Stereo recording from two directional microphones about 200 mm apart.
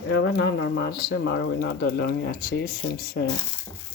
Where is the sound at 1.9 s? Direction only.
55° left (ahead or behind).